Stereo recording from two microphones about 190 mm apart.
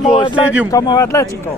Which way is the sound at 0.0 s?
5° right (ahead or behind).